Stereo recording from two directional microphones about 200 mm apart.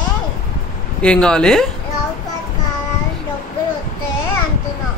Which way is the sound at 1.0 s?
5° left (ahead or behind).